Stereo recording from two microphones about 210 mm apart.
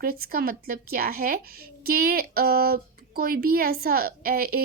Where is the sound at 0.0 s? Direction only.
45° right (ahead or behind).